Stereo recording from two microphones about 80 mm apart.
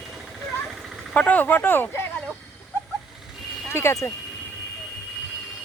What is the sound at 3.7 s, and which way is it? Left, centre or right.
Speech, left.